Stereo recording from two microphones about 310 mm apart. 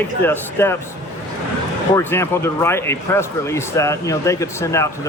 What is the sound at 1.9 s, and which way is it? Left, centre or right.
Speech, centre.